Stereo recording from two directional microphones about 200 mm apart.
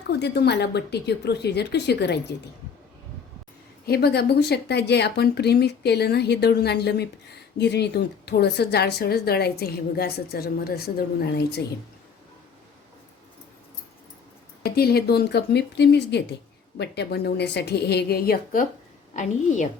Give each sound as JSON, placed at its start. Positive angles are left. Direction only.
{"t": 0.1, "sound": "speech", "side_deg": 55}
{"t": 3.8, "sound": "speech", "side_deg": 55}
{"t": 14.6, "sound": "a woman's voice", "side_deg": 50}